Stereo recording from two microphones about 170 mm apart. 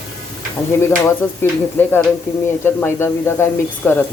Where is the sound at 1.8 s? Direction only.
10° left (ahead or behind).